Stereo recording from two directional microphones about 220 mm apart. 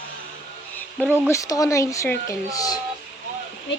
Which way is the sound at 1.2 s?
15° left (ahead or behind).